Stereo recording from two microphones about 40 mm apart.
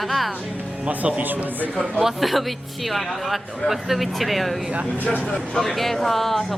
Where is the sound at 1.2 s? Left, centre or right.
Right.